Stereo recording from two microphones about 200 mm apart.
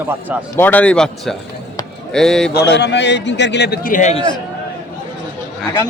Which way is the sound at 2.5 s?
60° left (ahead or behind).